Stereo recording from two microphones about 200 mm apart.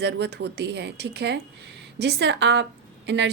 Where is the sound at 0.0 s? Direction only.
55° right (ahead or behind).